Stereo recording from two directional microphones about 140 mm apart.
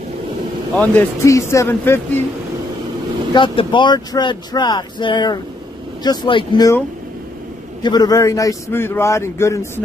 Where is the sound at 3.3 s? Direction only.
35° left (ahead or behind).